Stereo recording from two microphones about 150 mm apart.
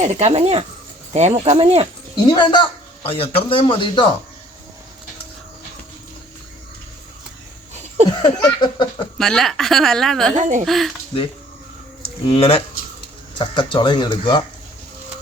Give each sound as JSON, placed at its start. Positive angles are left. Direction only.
{"t": 0.0, "sound": "speech", "side_deg": -50}
{"t": 2.3, "sound": "speech", "side_deg": 30}
{"t": 8.2, "sound": "a sound", "side_deg": 30}
{"t": 9.1, "sound": "speech", "side_deg": 5}
{"t": 10.3, "sound": "speech", "side_deg": -55}
{"t": 10.7, "sound": "speech", "side_deg": 0}
{"t": 12.2, "sound": "speech", "side_deg": 40}